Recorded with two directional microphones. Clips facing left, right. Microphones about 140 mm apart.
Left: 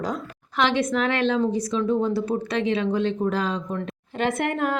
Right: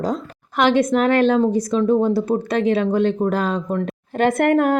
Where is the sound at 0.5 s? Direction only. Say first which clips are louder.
Right 6 dB; 45° right (ahead or behind).